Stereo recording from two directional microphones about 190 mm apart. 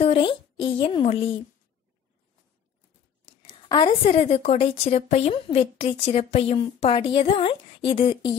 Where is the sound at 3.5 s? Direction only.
25° left (ahead or behind).